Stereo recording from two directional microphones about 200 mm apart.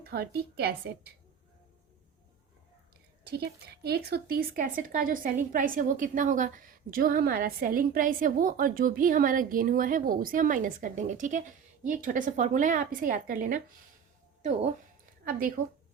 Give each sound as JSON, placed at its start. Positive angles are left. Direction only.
{"t": 0.0, "sound": "speech", "side_deg": -50}
{"t": 3.2, "sound": "speech", "side_deg": -50}
{"t": 15.3, "sound": "speech", "side_deg": -45}